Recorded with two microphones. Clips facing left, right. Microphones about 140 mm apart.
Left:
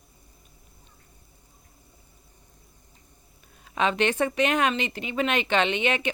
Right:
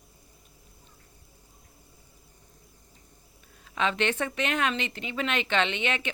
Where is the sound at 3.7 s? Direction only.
15° left (ahead or behind).